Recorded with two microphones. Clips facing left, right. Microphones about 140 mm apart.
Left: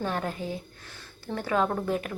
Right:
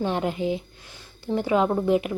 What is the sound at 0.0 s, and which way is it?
Speech, 20° right (ahead or behind).